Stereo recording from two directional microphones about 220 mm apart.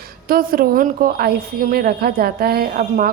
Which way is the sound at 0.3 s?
40° right (ahead or behind).